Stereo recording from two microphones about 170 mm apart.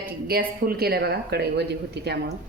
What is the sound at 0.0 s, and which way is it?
Speech, 60° right (ahead or behind).